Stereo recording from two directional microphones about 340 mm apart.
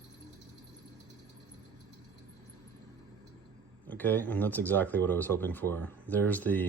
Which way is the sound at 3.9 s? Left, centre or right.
Centre.